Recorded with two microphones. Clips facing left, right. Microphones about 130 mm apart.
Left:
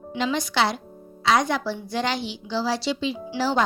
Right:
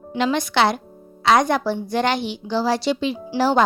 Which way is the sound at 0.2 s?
60° right (ahead or behind).